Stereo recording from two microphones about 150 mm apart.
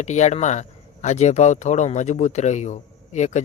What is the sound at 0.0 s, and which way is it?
Speech, 50° left (ahead or behind).